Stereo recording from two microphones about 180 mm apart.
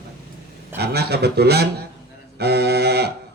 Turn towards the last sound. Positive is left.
turn(degrees=-60)  # may be behind; listen again after turning